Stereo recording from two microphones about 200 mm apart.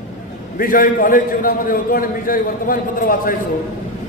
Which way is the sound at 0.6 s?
45° left (ahead or behind).